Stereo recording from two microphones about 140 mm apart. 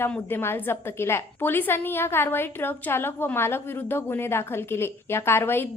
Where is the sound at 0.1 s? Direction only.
15° left (ahead or behind).